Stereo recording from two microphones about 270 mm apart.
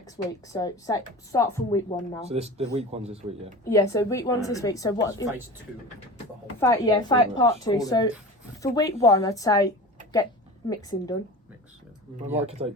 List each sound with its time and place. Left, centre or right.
0.0 s a woman's voice: centre
2.2 s a man's voice: right
3.6 s a woman's voice: centre
6.6 s a woman's voice: centre
12.6 s a man's voice: centre